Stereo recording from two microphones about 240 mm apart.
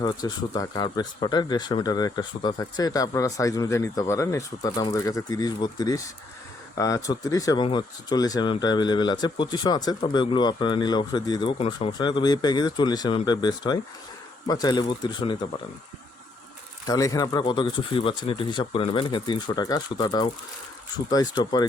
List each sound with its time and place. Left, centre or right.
0.0 s speech: centre
16.8 s speech: centre